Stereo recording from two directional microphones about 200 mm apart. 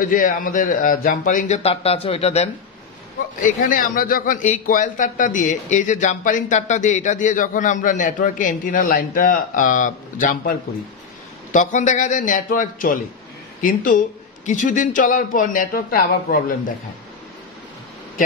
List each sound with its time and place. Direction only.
0.0 s a man's voice: 45° left (ahead or behind)
11.5 s a man's voice: 40° left (ahead or behind)